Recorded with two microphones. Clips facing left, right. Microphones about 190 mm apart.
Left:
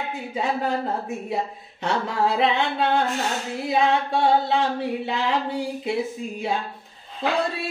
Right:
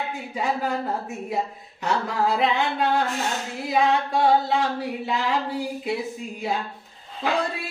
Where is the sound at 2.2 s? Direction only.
25° left (ahead or behind).